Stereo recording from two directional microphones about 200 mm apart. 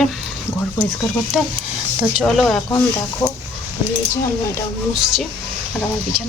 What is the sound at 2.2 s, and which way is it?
Speech, centre (ahead or behind).